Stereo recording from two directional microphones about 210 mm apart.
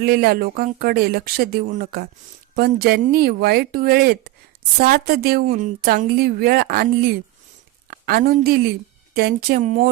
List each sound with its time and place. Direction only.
0.0 s a woman's voice: 50° right (ahead or behind)
9.6 s speech: 35° right (ahead or behind)